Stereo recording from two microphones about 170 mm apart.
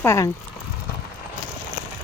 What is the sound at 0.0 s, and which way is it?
Speech, 15° left (ahead or behind).